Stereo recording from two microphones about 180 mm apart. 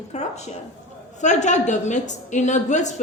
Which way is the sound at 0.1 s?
40° left (ahead or behind).